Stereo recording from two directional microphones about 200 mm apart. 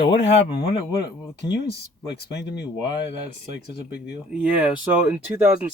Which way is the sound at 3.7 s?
55° left (ahead or behind).